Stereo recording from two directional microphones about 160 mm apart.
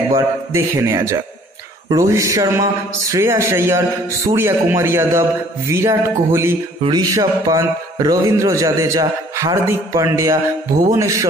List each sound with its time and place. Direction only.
0.1 s a man's voice: 20° right (ahead or behind)